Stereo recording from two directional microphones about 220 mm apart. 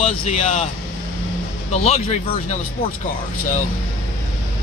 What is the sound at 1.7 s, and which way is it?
Speech, 30° left (ahead or behind).